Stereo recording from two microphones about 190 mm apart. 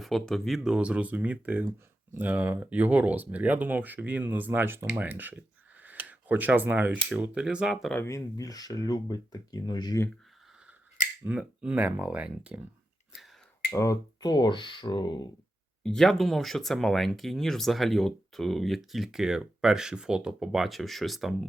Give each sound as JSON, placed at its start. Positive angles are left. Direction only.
{"t": 0.0, "sound": "speech", "side_deg": 0}
{"t": 8.0, "sound": "speech", "side_deg": 15}
{"t": 11.2, "sound": "speech", "side_deg": -5}
{"t": 13.7, "sound": "speech", "side_deg": 20}
{"t": 15.8, "sound": "speech", "side_deg": 5}